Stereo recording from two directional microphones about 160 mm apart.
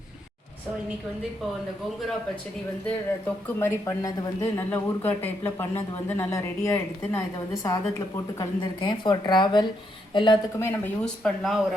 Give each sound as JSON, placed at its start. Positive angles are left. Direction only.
{"t": 3.6, "sound": "a woman's voice", "side_deg": 20}
{"t": 4.7, "sound": "a woman's voice", "side_deg": 10}
{"t": 10.6, "sound": "speech", "side_deg": 15}
{"t": 11.0, "sound": "speech", "side_deg": 5}